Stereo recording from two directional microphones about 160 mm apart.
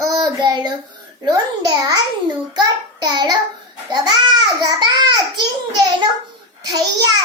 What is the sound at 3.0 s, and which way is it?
A child's voice, 25° right (ahead or behind).